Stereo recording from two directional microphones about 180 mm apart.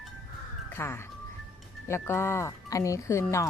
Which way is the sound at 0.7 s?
15° left (ahead or behind).